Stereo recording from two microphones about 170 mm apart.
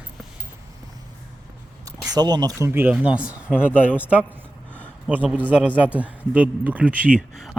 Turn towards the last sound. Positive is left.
turn(degrees=0)  # may be behind; listen again after turning